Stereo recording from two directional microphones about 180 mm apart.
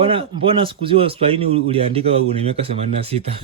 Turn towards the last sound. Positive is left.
turn(degrees=-35)  # may be behind; listen again after turning